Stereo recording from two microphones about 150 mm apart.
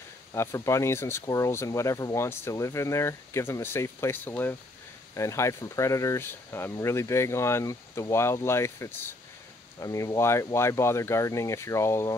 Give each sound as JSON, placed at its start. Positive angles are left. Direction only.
{"t": 0.3, "sound": "speech", "side_deg": 20}